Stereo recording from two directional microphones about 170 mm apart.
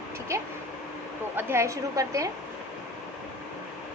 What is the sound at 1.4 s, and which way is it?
Speech, 15° right (ahead or behind).